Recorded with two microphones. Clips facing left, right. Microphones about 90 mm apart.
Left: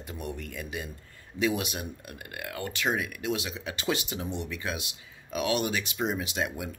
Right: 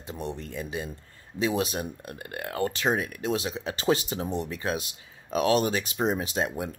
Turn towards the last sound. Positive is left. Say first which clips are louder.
# right 3 dB
turn(degrees=-35)  # may be behind; listen again after turning